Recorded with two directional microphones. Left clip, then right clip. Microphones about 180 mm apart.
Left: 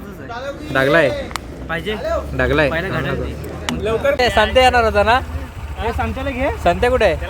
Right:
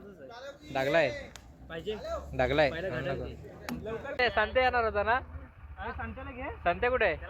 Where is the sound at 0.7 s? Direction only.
5° right (ahead or behind).